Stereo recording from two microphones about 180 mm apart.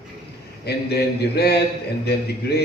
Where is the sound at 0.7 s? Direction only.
65° left (ahead or behind).